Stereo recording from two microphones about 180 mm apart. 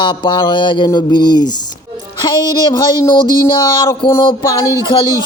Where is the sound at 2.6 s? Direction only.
25° left (ahead or behind).